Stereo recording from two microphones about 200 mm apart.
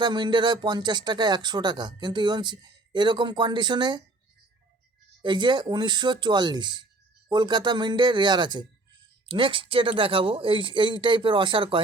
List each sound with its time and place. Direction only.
0.0 s speech: 20° right (ahead or behind)
5.2 s speech: 20° right (ahead or behind)